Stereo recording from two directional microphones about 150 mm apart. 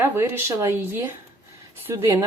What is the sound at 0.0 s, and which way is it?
A woman's voice, 15° right (ahead or behind).